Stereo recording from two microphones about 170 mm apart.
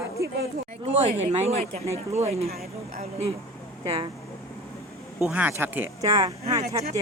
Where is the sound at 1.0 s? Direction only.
40° right (ahead or behind).